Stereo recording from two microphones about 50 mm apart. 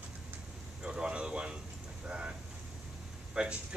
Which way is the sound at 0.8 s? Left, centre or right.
Centre.